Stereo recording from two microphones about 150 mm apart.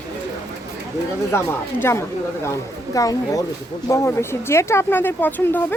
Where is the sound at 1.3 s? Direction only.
15° left (ahead or behind).